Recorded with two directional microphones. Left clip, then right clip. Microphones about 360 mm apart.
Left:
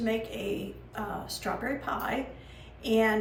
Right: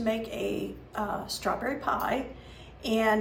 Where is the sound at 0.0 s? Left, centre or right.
Centre.